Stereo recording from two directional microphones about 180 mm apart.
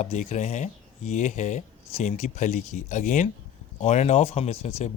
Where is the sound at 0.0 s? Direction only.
40° left (ahead or behind).